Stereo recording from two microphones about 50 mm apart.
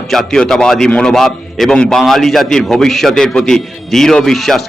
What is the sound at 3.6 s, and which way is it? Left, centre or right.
A man's voice, centre.